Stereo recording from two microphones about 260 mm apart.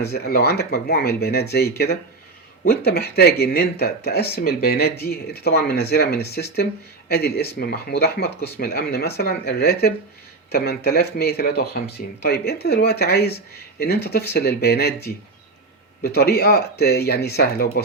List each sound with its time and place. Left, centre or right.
0.0 s speech: left
16.0 s speech: left